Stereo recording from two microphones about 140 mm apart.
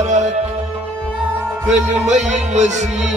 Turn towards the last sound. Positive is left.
turn(degrees=-55)  # may be behind; listen again after turning